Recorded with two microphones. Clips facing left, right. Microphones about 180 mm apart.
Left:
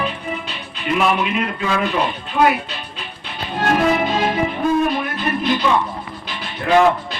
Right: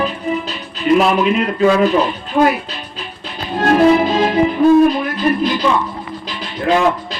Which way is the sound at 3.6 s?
30° right (ahead or behind).